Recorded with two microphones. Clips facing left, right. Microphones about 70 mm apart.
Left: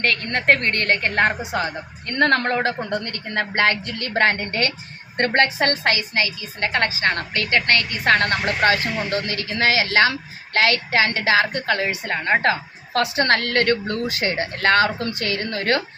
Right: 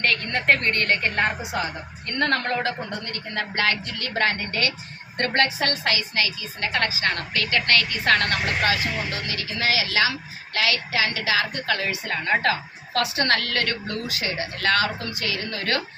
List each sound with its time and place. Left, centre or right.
0.0 s a woman's voice: left